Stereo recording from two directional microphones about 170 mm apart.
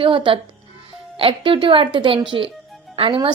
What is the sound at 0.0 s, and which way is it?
A woman's voice, 30° right (ahead or behind).